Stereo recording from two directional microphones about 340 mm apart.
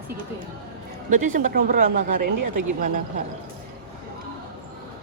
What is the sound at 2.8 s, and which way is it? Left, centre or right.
Speech, right.